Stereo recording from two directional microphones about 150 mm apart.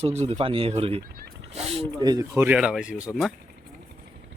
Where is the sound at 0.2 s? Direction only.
45° right (ahead or behind).